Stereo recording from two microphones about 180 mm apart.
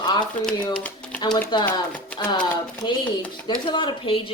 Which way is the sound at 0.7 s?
5° left (ahead or behind).